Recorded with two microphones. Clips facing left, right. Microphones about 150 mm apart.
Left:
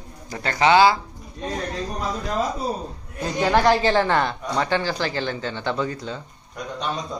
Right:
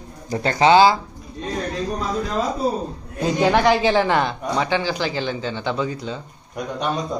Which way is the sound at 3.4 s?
5° right (ahead or behind).